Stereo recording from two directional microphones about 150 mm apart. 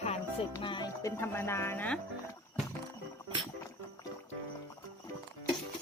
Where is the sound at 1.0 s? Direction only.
15° left (ahead or behind).